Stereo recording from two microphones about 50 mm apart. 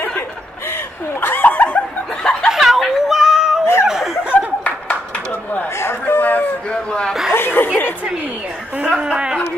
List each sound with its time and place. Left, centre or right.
1.2 s snicker: left
2.5 s a sound: centre
3.8 s chuckle: centre
4.2 s laughter: right
4.6 s a sound: left
6.7 s chuckle: left
7.3 s chuckle: left
8.8 s speech: centre